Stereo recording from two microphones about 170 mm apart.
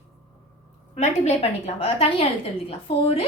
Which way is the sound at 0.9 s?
40° left (ahead or behind).